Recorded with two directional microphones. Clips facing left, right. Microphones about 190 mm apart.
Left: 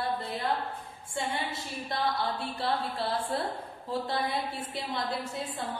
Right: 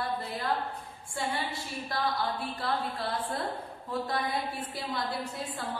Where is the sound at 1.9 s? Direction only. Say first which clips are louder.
Left 1 dB; 30° left (ahead or behind).